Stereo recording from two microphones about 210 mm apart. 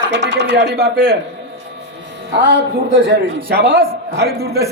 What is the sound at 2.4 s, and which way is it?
A man's voice, 55° right (ahead or behind).